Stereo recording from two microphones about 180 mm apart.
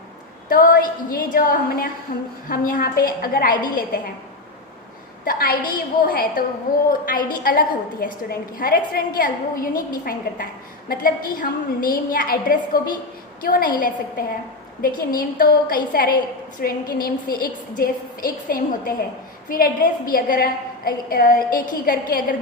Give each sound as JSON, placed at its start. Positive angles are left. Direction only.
{"t": 0.4, "sound": "a woman's voice", "side_deg": 50}
{"t": 5.2, "sound": "a woman's voice", "side_deg": 55}